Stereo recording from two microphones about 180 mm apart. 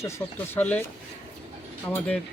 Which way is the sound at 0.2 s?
10° left (ahead or behind).